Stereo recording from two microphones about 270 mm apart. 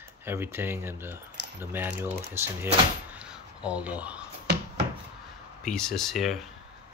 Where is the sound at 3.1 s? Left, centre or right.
Centre.